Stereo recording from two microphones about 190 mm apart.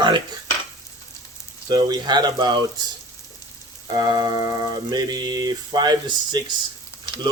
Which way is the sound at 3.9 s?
20° right (ahead or behind).